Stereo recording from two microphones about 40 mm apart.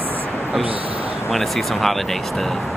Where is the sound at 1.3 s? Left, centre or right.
Centre.